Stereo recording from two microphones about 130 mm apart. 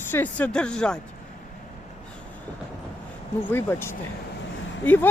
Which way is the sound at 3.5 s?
20° left (ahead or behind).